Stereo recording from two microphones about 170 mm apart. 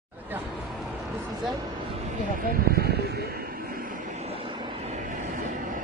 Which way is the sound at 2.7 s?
70° right (ahead or behind).